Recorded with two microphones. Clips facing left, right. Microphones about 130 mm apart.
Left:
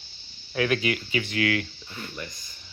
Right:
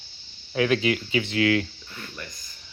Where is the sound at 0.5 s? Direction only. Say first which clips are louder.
Right 3 dB; 20° right (ahead or behind).